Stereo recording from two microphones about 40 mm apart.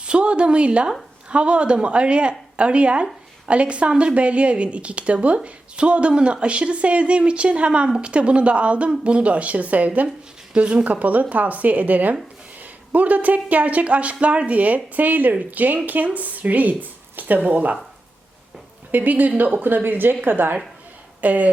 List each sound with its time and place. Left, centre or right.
0.0 s speech: right
10.5 s speech: right
18.9 s speech: right
19.6 s a woman's voice: right
21.2 s speech: right